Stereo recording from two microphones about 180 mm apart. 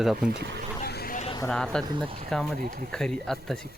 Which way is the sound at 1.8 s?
25° right (ahead or behind).